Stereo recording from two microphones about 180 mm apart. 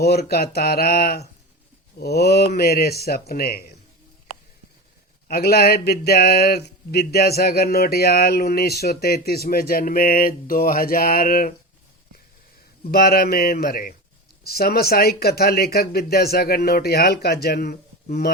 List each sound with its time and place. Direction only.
0.0 s speech: 60° left (ahead or behind)
5.3 s speech: 60° left (ahead or behind)
12.8 s speech: 60° left (ahead or behind)